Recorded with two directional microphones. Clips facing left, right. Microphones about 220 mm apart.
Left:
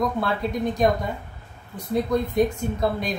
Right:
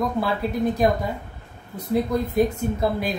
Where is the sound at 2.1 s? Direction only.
5° right (ahead or behind).